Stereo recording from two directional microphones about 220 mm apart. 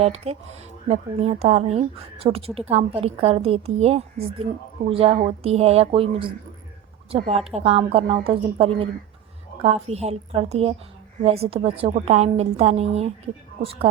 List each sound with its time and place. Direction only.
0.0 s a woman's voice: 30° right (ahead or behind)